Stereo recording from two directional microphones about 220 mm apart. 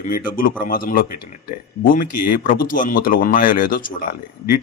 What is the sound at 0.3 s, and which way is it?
Speech, 40° left (ahead or behind).